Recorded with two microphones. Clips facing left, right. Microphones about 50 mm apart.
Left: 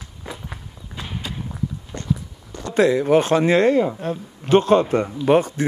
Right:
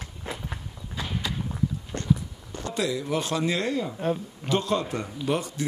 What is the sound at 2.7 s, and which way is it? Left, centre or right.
Speech, left.